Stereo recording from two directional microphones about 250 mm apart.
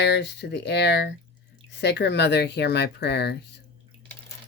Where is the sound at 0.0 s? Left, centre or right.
Left.